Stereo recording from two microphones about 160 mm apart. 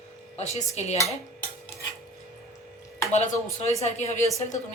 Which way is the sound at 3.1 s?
45° left (ahead or behind).